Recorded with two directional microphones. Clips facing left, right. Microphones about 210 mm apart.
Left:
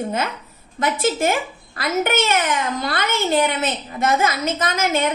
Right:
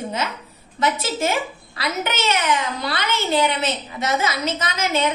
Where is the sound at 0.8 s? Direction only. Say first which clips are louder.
Left 2 dB; 50° left (ahead or behind).